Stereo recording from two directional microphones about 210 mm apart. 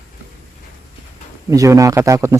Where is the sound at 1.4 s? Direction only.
15° right (ahead or behind).